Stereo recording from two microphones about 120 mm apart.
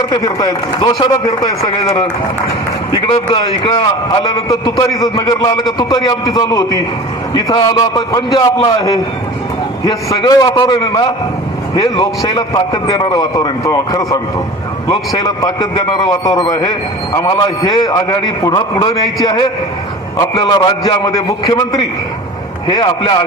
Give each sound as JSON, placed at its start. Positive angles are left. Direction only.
{"t": 0.1, "sound": "a man's voice", "side_deg": 30}
{"t": 9.8, "sound": "a man's voice", "side_deg": 30}